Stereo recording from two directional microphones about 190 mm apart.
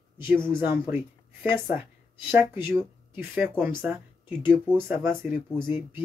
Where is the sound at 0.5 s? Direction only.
10° right (ahead or behind).